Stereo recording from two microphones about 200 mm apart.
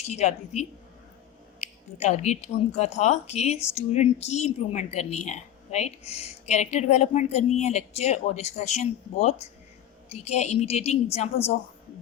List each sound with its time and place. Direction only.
0.0 s speech: 35° left (ahead or behind)